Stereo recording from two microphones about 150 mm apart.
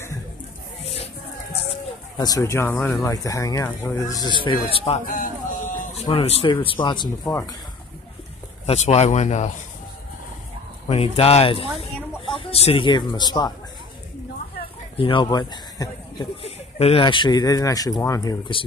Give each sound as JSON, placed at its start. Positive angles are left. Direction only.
{"t": 2.1, "sound": "speech", "side_deg": 25}
{"t": 5.0, "sound": "a sound", "side_deg": 65}
{"t": 6.0, "sound": "speech", "side_deg": 40}
{"t": 7.2, "sound": "speech", "side_deg": 20}
{"t": 8.6, "sound": "speech", "side_deg": 45}
{"t": 10.9, "sound": "speech", "side_deg": 40}
{"t": 15.0, "sound": "speech", "side_deg": 35}
{"t": 16.4, "sound": "speech", "side_deg": 40}